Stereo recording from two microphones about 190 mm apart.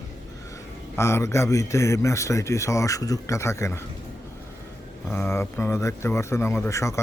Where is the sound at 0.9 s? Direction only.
15° left (ahead or behind).